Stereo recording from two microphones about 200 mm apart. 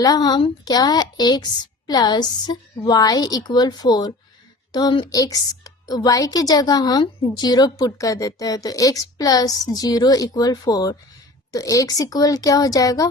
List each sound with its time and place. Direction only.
0.0 s a woman's voice: 20° left (ahead or behind)